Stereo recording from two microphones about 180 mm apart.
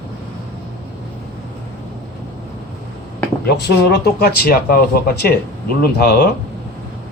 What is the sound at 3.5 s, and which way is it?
Speech, 65° left (ahead or behind).